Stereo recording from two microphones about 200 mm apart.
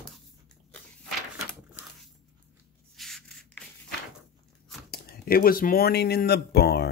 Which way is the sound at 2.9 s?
Centre (ahead or behind).